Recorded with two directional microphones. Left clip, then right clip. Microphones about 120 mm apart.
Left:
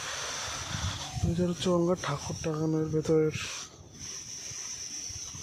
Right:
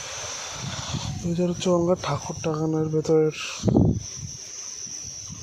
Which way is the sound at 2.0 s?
30° right (ahead or behind).